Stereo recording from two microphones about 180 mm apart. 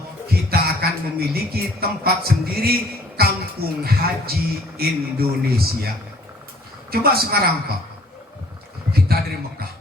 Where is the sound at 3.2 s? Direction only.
60° right (ahead or behind).